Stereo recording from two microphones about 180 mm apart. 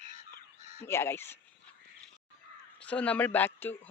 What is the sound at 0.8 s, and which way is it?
Speech, 15° left (ahead or behind).